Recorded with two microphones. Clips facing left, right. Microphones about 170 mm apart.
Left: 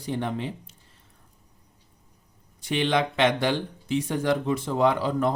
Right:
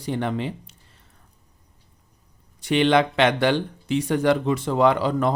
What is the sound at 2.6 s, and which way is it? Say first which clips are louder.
Speech: right 6 dB; 70° right (ahead or behind).